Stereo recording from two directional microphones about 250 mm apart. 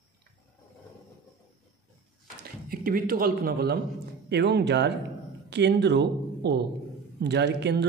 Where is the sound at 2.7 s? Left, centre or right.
Right.